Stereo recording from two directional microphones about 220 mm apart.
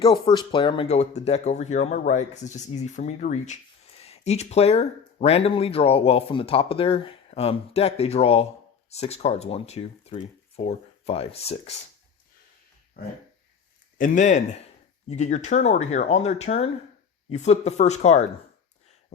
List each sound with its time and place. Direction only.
0.0 s speech: 20° left (ahead or behind)
14.0 s speech: 35° left (ahead or behind)